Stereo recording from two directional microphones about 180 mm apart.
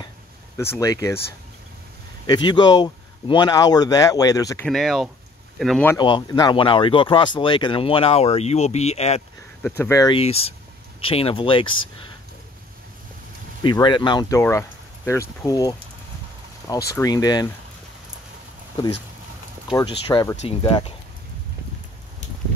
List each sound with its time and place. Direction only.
0.6 s speech: 15° left (ahead or behind)
2.2 s speech: 25° left (ahead or behind)
4.6 s speech: centre (ahead or behind)
5.9 s speech: 25° left (ahead or behind)
9.6 s speech: 10° left (ahead or behind)
10.1 s speech: 35° left (ahead or behind)
13.6 s speech: 25° left (ahead or behind)
14.4 s speech: 15° left (ahead or behind)
16.9 s speech: 20° left (ahead or behind)
19.7 s speech: 25° left (ahead or behind)